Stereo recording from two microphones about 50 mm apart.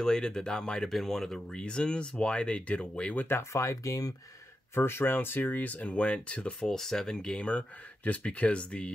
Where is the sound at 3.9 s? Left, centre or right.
Left.